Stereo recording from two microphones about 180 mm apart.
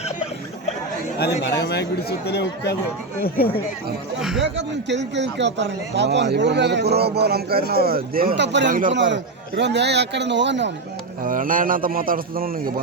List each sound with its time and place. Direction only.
1.2 s speech: 70° left (ahead or behind)
4.2 s speech: 5° right (ahead or behind)
4.5 s speech: 75° right (ahead or behind)
11.2 s a man's voice: 50° right (ahead or behind)